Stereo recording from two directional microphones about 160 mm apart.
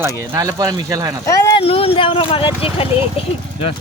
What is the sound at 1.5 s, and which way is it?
Speech, 35° left (ahead or behind).